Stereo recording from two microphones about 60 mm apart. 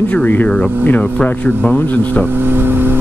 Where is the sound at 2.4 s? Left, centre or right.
Right.